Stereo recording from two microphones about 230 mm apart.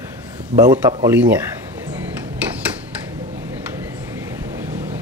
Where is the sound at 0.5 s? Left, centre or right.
Centre.